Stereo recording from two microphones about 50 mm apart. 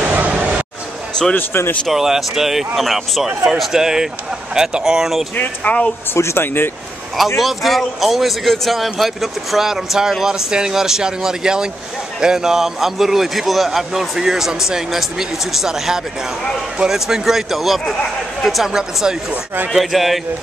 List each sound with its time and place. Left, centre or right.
0.0 s a sound: right
1.3 s speech: left
1.9 s a man's voice: centre
5.3 s speech: left
6.1 s speech: left
6.4 s speech: left
7.3 s a man's voice: centre
18.7 s a man's voice: centre